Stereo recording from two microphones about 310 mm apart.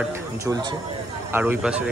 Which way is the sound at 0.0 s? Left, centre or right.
Centre.